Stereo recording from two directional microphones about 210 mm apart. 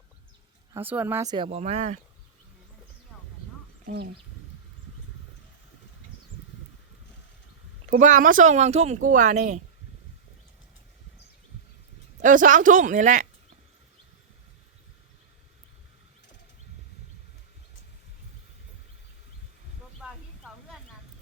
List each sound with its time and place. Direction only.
0.7 s speech: 10° right (ahead or behind); by 2.0 s 35° right (ahead or behind)
3.8 s speech: 50° right (ahead or behind)
7.9 s speech: 35° right (ahead or behind)
12.2 s speech: 40° right (ahead or behind)